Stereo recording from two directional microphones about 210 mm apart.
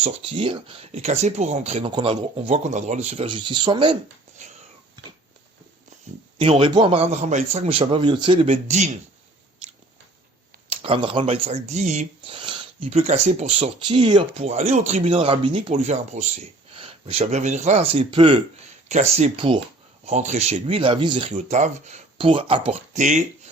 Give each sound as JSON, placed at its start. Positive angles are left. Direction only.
{"t": 0.0, "sound": "speech", "side_deg": -25}
{"t": 4.4, "sound": "wheeze", "side_deg": -35}
{"t": 6.4, "sound": "speech", "side_deg": -25}
{"t": 10.7, "sound": "speech", "side_deg": -25}
{"t": 21.3, "sound": "speech", "side_deg": -35}